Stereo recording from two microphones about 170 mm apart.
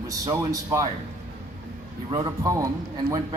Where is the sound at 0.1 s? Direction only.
20° right (ahead or behind).